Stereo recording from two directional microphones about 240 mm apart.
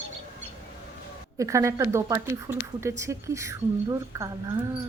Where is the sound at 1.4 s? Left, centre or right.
Centre.